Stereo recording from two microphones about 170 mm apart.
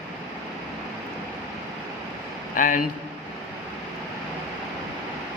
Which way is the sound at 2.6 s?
50° left (ahead or behind).